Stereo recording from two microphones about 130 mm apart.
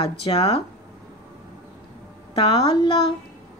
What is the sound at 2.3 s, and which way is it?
Speech, 45° left (ahead or behind).